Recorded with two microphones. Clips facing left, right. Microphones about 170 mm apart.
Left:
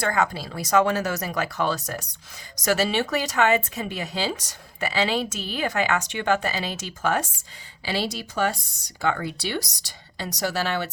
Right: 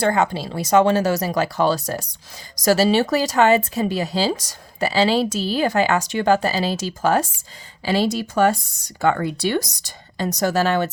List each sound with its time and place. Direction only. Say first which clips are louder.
0.0 s speech: right 5 dB; 30° right (ahead or behind)
7.9 s speech: right 8 dB; 50° right (ahead or behind)